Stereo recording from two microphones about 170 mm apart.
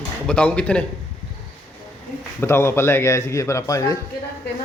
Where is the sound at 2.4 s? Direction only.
15° left (ahead or behind).